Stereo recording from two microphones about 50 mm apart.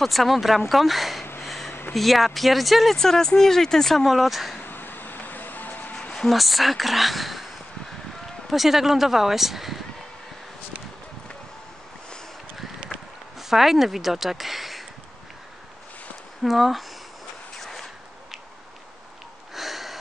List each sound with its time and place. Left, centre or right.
0.0 s speech: centre
1.4 s a sound: centre
1.7 s a sound: left
2.0 s speech: centre
4.6 s vehicle: left
6.1 s speech: centre
8.5 s speech: centre
12.5 s a sound: centre
16.4 s speech: centre
17.6 s zipper: centre
19.5 s sniff: centre